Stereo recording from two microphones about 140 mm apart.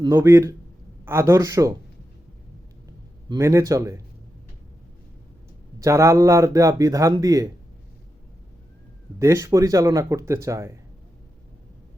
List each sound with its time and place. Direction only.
0.1 s speech: 20° right (ahead or behind)
3.3 s speech: 20° right (ahead or behind)
5.8 s speech: 20° right (ahead or behind)
9.1 s speech: 20° right (ahead or behind)